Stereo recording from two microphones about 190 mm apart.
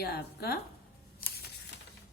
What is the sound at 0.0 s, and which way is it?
Speech, 55° left (ahead or behind).